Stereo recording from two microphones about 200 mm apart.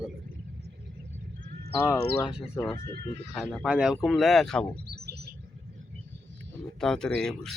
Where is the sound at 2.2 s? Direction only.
20° left (ahead or behind).